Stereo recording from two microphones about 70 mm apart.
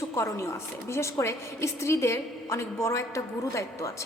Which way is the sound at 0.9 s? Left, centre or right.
Left.